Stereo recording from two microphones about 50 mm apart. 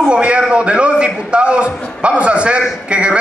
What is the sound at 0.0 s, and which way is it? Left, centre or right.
A man's voice, right.